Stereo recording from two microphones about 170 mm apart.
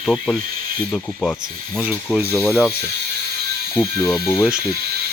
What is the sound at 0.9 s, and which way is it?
Speech, 15° left (ahead or behind).